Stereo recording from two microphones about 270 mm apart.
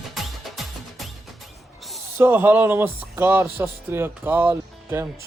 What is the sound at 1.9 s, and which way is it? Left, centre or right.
Speech, centre.